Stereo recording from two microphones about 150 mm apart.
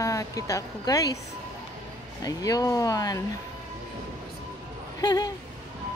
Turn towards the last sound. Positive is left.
turn(degrees=25)  # may be behind; listen again after turning